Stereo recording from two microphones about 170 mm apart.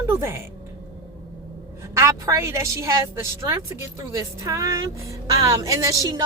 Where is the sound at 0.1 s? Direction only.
15° right (ahead or behind).